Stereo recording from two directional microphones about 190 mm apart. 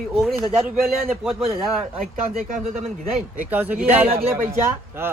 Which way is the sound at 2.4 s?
45° right (ahead or behind).